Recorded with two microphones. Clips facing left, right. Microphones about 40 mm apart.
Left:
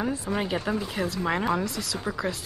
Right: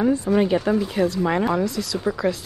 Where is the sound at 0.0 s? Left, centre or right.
Centre.